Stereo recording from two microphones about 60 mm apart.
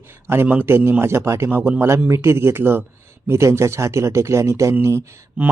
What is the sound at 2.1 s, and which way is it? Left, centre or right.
Speech, right.